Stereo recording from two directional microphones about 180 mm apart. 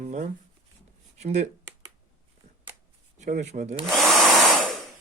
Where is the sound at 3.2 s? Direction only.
45° right (ahead or behind).